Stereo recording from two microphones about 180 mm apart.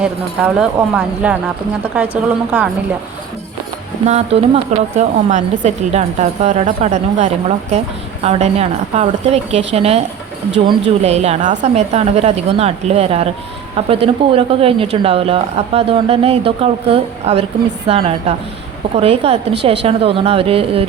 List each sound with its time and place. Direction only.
0.0 s speech: 10° right (ahead or behind)
4.0 s a woman's voice: 35° right (ahead or behind)
11.0 s a woman's voice: 35° right (ahead or behind)